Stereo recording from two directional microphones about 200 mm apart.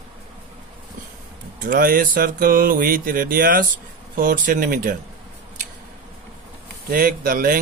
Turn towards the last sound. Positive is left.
turn(degrees=-45)  # may be behind; listen again after turning